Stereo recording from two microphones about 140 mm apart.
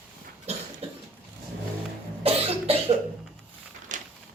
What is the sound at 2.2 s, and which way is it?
Cough, 45° right (ahead or behind).